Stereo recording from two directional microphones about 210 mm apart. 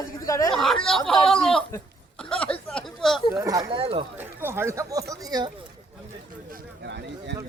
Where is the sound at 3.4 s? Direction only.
15° right (ahead or behind).